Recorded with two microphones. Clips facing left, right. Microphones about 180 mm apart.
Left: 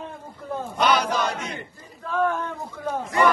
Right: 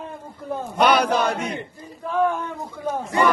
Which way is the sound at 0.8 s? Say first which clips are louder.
Right 4 dB; 60° right (ahead or behind).